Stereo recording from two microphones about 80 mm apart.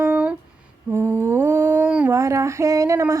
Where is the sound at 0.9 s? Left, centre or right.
Right.